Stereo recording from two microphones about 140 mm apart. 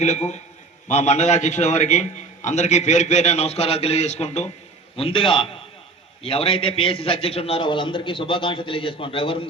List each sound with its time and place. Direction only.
0.0 s a man's voice: 55° left (ahead or behind)
4.9 s a man's voice: 40° left (ahead or behind)